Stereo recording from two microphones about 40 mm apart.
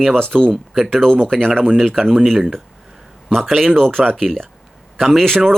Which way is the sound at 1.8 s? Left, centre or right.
Centre.